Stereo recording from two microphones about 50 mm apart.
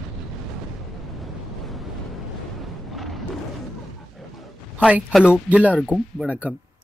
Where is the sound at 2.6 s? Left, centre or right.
Centre.